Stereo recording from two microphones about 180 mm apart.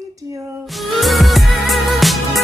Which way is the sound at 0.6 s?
Centre (ahead or behind).